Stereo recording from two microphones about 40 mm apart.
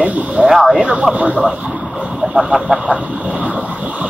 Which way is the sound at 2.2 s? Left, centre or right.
Centre.